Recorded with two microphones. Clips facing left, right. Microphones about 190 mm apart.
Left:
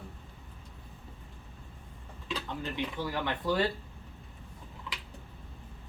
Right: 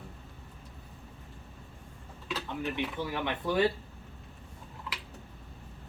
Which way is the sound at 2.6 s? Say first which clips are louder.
Right 3 dB; 15° right (ahead or behind).